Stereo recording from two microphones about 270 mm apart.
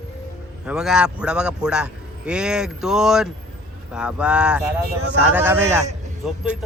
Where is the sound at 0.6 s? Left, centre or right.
Centre.